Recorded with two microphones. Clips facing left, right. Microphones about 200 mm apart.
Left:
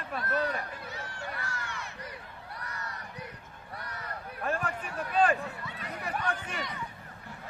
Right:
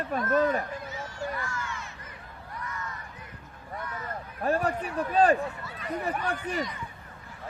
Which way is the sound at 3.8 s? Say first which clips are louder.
Right 5 dB; 40° left (ahead or behind).